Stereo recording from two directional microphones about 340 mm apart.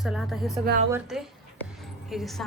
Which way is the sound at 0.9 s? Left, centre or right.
Centre.